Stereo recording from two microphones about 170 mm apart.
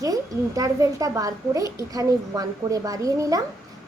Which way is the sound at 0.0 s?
20° right (ahead or behind).